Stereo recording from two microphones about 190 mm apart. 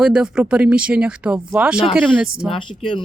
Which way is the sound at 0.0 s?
5° right (ahead or behind).